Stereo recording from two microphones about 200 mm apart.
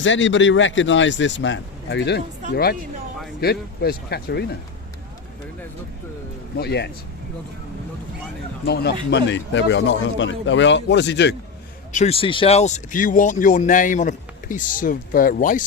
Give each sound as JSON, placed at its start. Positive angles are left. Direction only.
{"t": 0.0, "sound": "a man's voice", "side_deg": 70}
{"t": 6.6, "sound": "a man's voice", "side_deg": 55}
{"t": 8.6, "sound": "a man's voice", "side_deg": 55}
{"t": 11.9, "sound": "speech", "side_deg": 35}